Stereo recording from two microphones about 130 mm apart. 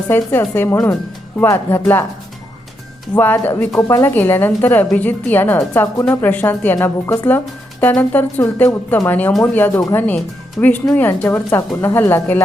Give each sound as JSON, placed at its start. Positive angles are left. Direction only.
{"t": 0.1, "sound": "speech", "side_deg": 15}
{"t": 3.2, "sound": "speech", "side_deg": 15}